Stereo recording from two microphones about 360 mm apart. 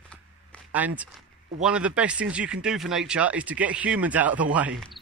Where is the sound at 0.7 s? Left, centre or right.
Centre.